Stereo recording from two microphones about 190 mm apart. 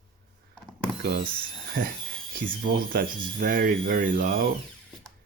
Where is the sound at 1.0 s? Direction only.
55° right (ahead or behind).